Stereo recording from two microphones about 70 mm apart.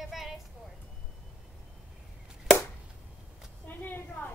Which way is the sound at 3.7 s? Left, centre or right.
Left.